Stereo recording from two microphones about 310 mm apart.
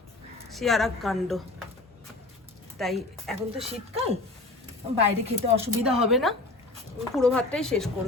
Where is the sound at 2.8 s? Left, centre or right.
Centre.